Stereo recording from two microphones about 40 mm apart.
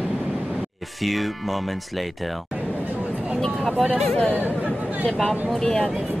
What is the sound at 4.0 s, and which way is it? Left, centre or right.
Speech, centre.